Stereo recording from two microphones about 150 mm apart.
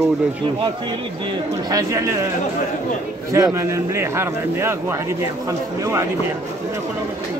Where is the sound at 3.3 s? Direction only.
20° right (ahead or behind).